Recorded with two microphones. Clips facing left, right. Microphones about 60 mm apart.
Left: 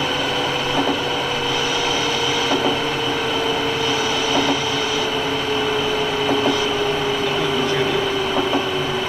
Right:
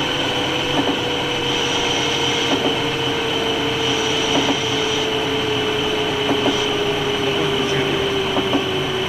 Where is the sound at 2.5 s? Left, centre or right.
Left.